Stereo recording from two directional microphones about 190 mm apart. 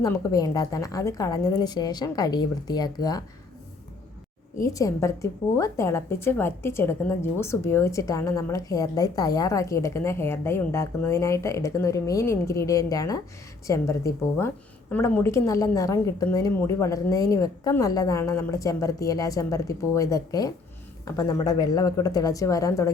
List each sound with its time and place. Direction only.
0.0 s a woman's voice: 15° left (ahead or behind)
4.6 s a woman's voice: 15° left (ahead or behind)